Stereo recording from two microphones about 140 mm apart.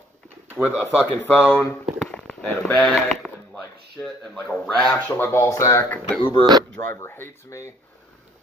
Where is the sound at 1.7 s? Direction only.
10° left (ahead or behind).